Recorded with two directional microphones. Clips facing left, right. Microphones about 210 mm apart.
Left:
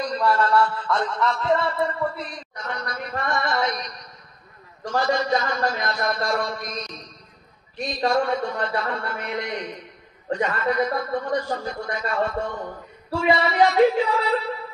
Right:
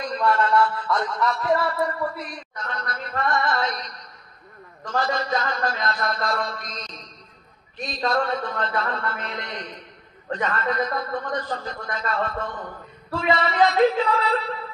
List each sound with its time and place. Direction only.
0.0 s a sound: 35° left (ahead or behind)
1.4 s music: 25° left (ahead or behind)
2.5 s a man's voice: 15° left (ahead or behind)